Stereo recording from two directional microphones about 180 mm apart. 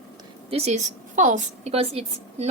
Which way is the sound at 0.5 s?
40° right (ahead or behind).